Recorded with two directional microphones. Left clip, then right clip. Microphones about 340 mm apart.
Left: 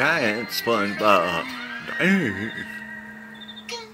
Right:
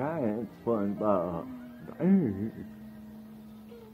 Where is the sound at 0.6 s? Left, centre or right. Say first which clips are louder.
Left 9 dB; left.